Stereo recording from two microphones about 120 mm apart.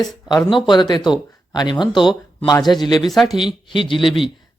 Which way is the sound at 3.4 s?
45° left (ahead or behind).